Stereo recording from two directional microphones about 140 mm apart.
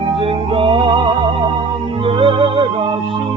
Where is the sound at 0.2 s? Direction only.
40° right (ahead or behind).